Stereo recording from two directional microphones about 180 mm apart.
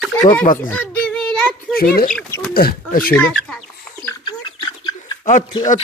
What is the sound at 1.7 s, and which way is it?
Speech, 55° left (ahead or behind).